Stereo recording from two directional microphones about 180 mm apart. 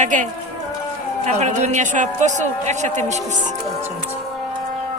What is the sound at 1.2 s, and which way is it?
A man's voice, 40° right (ahead or behind).